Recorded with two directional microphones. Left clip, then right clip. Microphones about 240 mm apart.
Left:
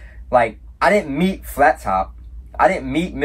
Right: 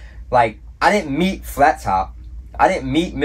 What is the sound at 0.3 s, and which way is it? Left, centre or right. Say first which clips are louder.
Speech: even; centre.